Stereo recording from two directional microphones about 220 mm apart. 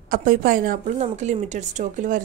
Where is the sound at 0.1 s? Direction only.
40° right (ahead or behind).